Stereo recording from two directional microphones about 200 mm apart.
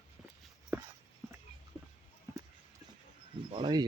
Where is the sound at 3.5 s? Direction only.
20° right (ahead or behind).